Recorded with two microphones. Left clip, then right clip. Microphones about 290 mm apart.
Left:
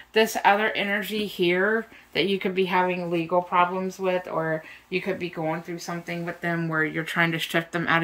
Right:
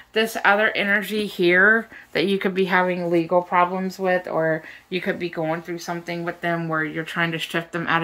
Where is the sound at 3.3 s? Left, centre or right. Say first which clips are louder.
Right 2 dB; centre.